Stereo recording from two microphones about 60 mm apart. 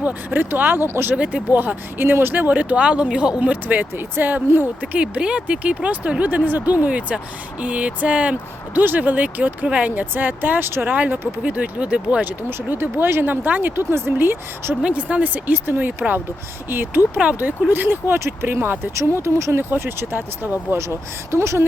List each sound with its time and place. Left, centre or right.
0.0 s speech: right
1.1 s speech: centre
1.5 s speech: right
8.8 s speech: right
10.8 s speech: right
12.5 s speech: right
14.8 s speech: centre; by 17.1 s right
17.2 s speech: right
17.7 s speech: right
18.9 s speech: right
19.7 s speech: right
20.7 s speech: right